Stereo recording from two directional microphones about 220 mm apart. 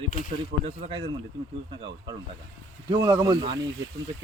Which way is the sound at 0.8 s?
25° right (ahead or behind).